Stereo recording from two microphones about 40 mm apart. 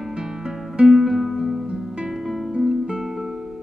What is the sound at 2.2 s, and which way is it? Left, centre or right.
Music, centre.